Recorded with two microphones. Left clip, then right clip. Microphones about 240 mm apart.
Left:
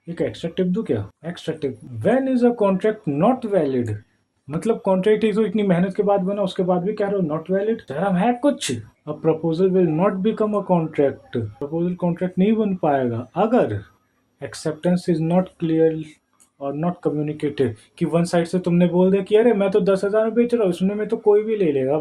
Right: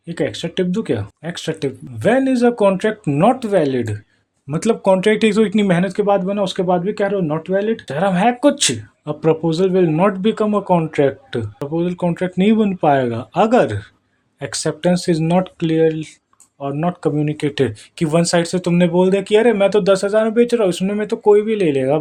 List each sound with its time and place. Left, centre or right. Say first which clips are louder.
0.1 s speech: right 4 dB; right